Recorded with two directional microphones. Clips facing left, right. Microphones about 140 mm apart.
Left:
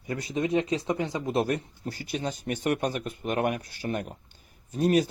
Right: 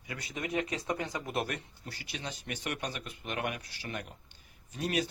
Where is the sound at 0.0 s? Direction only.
40° left (ahead or behind).